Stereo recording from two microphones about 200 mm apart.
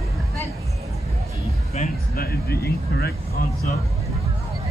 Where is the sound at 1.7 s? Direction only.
45° left (ahead or behind).